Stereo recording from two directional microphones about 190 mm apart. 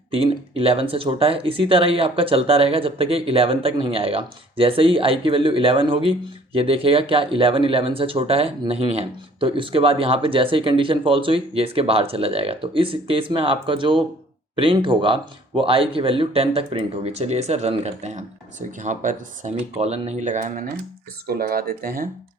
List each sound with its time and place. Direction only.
0.1 s speech: 30° right (ahead or behind); by 22.1 s 50° right (ahead or behind)